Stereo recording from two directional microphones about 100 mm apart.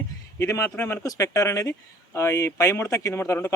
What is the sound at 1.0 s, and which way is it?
Speech, 35° left (ahead or behind).